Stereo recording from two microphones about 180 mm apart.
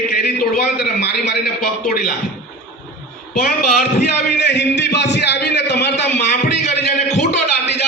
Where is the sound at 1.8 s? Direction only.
55° left (ahead or behind).